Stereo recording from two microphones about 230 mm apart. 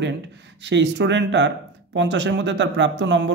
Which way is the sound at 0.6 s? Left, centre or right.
Right.